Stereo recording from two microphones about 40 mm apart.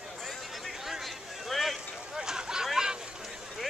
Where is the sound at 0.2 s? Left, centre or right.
Centre.